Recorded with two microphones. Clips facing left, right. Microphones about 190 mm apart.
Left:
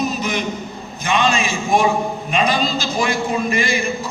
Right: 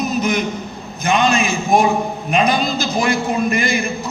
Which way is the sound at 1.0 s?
60° right (ahead or behind).